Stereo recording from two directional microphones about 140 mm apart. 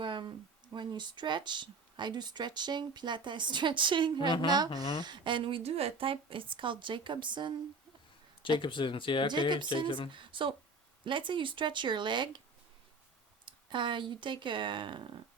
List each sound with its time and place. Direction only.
0.0 s a woman's voice: 35° right (ahead or behind)
8.4 s speech: 35° left (ahead or behind)
10.1 s a woman's voice: 35° right (ahead or behind)
13.4 s speech: 35° right (ahead or behind)